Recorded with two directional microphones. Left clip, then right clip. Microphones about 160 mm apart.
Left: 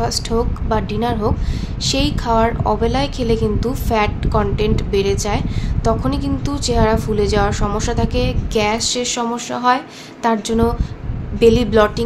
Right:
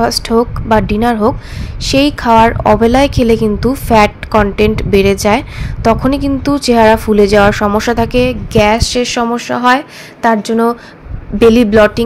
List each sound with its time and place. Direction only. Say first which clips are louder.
0.0 s speech: right 8 dB; 40° right (ahead or behind)